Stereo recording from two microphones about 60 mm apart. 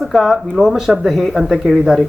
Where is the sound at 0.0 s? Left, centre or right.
Centre.